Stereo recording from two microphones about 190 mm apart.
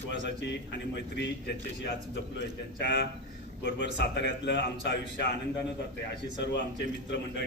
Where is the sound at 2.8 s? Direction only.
65° left (ahead or behind).